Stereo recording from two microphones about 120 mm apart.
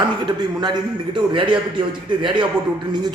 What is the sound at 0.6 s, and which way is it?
A man's voice, 40° right (ahead or behind).